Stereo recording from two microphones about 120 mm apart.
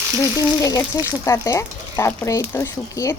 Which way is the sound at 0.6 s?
30° left (ahead or behind).